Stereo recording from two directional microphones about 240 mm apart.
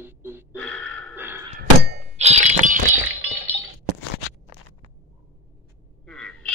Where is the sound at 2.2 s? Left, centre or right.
Right.